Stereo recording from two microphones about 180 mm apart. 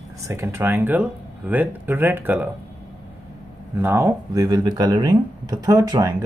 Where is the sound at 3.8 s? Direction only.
15° right (ahead or behind).